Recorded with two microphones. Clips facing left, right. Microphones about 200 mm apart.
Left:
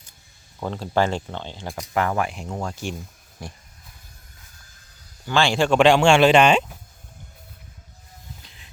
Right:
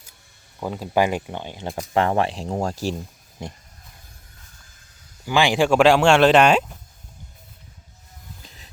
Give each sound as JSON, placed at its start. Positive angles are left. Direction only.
{"t": 0.6, "sound": "speech", "side_deg": -10}
{"t": 1.9, "sound": "speech", "side_deg": -30}
{"t": 3.4, "sound": "speech", "side_deg": -20}
{"t": 5.2, "sound": "speech", "side_deg": -15}